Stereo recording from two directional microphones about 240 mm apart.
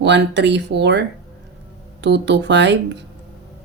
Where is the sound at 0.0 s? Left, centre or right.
Right.